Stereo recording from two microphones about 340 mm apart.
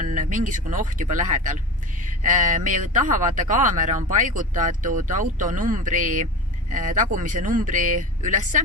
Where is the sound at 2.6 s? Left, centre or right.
Right.